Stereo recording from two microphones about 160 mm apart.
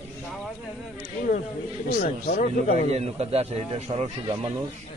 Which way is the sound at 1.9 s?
55° left (ahead or behind).